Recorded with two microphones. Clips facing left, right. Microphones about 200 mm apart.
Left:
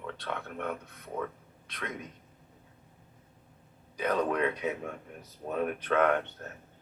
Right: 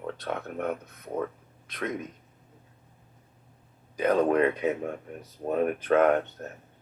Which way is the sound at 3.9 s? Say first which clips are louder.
Right 6 dB; 50° right (ahead or behind).